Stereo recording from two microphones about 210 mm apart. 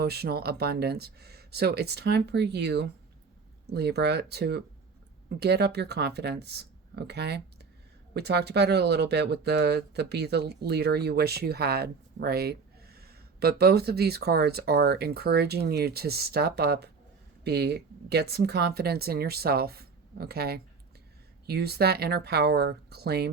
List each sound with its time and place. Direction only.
0.0 s speech: 50° right (ahead or behind)